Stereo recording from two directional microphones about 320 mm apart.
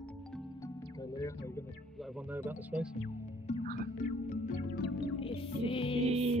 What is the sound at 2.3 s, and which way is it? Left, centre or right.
Speech, centre.